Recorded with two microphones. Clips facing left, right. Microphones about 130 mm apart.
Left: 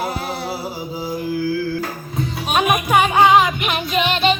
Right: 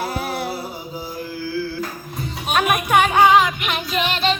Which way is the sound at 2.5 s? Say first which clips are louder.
Left 1 dB; 15° left (ahead or behind).